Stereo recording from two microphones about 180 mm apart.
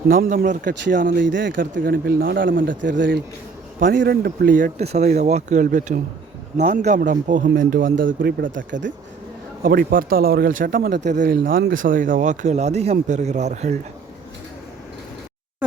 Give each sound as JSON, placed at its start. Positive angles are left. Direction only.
{"t": 0.1, "sound": "speech", "side_deg": -55}
{"t": 1.2, "sound": "speech", "side_deg": -90}
{"t": 1.8, "sound": "speech", "side_deg": -55}
{"t": 2.6, "sound": "speech", "side_deg": -90}
{"t": 3.8, "sound": "speech", "side_deg": -50}
{"t": 4.0, "sound": "speech", "side_deg": -65}
{"t": 9.6, "sound": "speech", "side_deg": -50}